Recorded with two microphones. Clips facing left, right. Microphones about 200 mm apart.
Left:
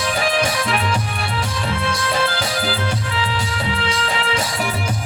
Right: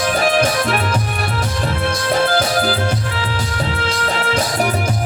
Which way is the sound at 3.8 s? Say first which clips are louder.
Right 3 dB; 45° right (ahead or behind).